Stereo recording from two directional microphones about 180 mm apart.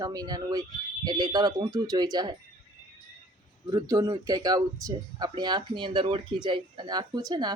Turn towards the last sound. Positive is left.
turn(degrees=-20)  # may be behind; listen again after turning